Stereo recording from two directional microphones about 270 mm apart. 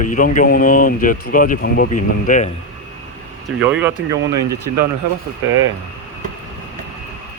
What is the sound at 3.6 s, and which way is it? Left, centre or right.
Speech, centre.